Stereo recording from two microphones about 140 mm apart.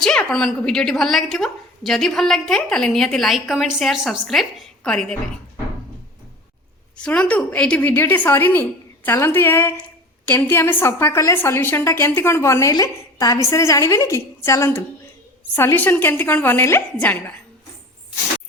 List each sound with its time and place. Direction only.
0.0 s a woman's voice: 5° left (ahead or behind)
6.9 s a woman's voice: 10° left (ahead or behind)